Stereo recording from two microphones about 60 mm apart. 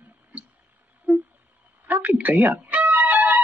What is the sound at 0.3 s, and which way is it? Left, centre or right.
Clicking, right.